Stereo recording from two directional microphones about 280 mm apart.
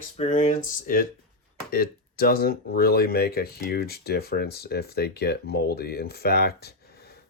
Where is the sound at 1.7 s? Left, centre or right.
Left.